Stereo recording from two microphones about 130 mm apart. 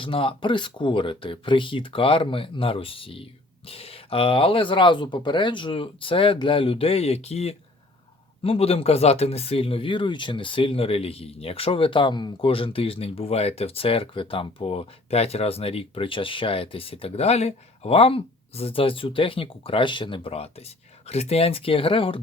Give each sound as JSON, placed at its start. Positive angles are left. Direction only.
{"t": 0.0, "sound": "speech", "side_deg": 45}